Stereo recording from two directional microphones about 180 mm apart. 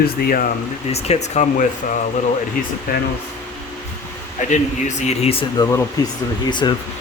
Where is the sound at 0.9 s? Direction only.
35° left (ahead or behind).